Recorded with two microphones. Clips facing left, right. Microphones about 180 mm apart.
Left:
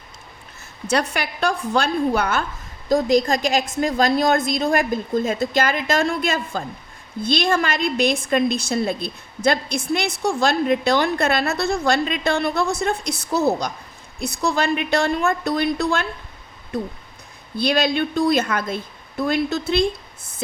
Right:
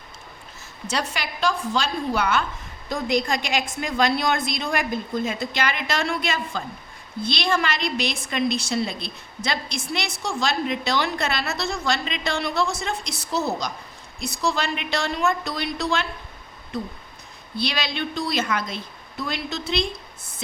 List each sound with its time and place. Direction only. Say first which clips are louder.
0.9 s a woman's voice: left 6 dB; 60° left (ahead or behind)
2.9 s a woman's voice: left 6 dB; 40° left (ahead or behind)
17.6 s a woman's voice: left 8 dB; 50° left (ahead or behind)